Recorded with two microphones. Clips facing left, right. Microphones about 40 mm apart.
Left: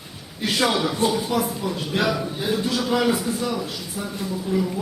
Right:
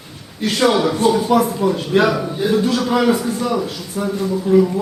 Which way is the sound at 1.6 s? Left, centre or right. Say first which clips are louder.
Right 8 dB; centre.